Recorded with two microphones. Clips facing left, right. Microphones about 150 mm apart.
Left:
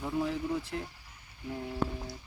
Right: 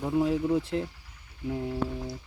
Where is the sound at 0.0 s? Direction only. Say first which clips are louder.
Right 6 dB; 20° right (ahead or behind).